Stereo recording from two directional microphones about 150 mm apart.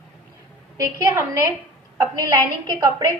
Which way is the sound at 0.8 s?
20° right (ahead or behind).